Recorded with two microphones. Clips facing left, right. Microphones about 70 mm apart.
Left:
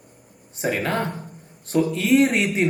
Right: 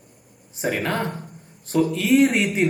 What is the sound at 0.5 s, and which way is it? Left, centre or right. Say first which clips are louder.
Speech: left 1 dB; centre.